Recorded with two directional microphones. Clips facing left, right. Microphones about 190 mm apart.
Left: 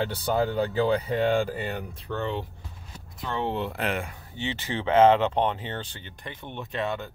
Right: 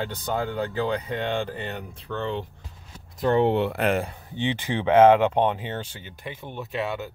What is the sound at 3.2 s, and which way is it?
Speech, 55° right (ahead or behind).